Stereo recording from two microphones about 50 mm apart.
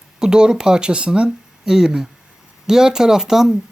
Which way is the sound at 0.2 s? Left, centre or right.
Centre.